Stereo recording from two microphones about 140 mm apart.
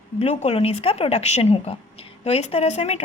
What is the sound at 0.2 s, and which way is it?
A woman's voice, 45° left (ahead or behind).